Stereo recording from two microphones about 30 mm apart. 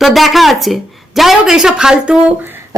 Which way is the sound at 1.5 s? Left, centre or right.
Centre.